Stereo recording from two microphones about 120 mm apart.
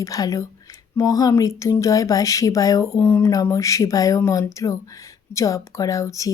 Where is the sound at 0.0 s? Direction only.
30° left (ahead or behind).